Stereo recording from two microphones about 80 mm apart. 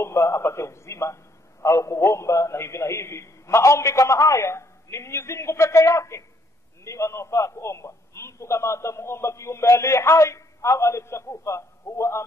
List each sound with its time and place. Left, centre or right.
0.0 s a man's voice: left